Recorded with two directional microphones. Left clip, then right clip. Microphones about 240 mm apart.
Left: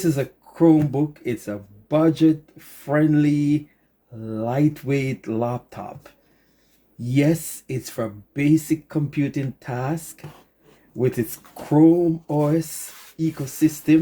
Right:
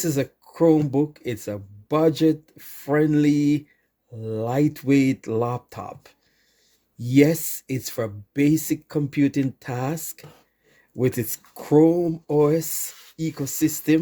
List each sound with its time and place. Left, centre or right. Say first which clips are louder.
0.0 s speech: left 2 dB; right